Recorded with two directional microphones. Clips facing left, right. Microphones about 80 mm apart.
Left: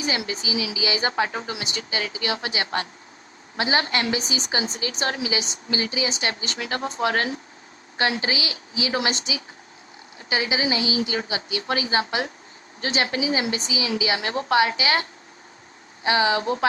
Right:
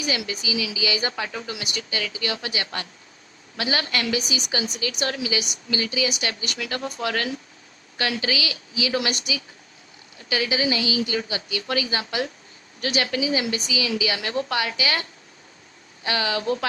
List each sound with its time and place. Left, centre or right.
0.0 s a woman's voice: left
16.0 s a woman's voice: left